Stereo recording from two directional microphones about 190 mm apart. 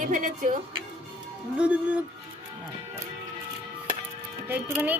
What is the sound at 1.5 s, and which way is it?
Speech, 5° right (ahead or behind).